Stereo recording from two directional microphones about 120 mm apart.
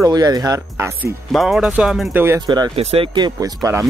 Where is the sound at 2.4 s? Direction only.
35° right (ahead or behind).